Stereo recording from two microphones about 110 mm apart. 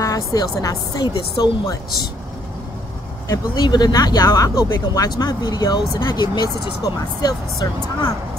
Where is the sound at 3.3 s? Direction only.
40° left (ahead or behind).